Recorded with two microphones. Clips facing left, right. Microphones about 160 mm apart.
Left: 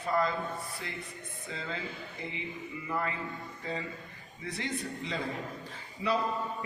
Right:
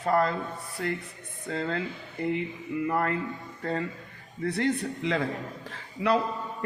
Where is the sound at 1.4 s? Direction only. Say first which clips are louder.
Right 9 dB; 65° right (ahead or behind).